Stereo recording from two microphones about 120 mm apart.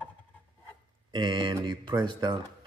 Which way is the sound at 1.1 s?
40° right (ahead or behind).